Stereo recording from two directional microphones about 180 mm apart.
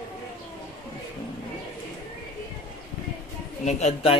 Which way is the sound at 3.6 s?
35° left (ahead or behind).